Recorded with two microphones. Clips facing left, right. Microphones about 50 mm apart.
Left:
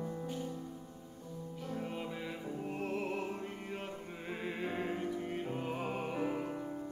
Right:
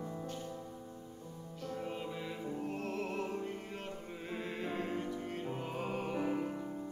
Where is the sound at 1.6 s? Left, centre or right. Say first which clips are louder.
Right 1 dB; centre.